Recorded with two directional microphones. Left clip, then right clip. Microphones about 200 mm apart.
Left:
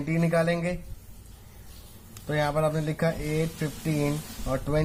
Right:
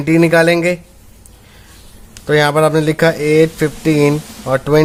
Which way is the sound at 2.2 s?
60° right (ahead or behind).